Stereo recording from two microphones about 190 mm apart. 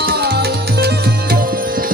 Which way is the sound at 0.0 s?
55° right (ahead or behind).